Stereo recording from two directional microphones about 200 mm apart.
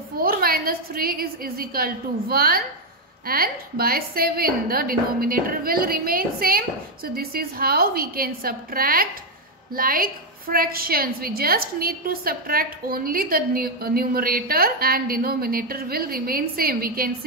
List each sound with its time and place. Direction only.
0.2 s a woman's voice: 50° right (ahead or behind)